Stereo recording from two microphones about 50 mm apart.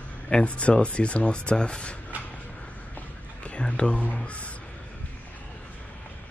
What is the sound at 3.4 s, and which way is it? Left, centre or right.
Speech, left.